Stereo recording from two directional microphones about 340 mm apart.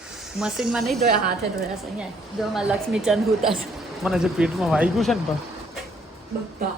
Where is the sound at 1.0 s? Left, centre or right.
Right.